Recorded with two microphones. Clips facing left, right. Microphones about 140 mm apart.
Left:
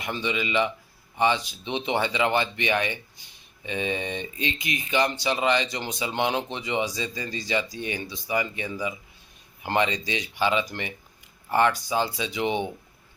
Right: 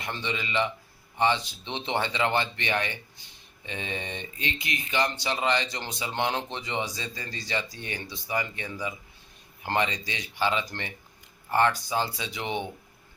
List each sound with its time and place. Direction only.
0.0 s speech: 15° left (ahead or behind)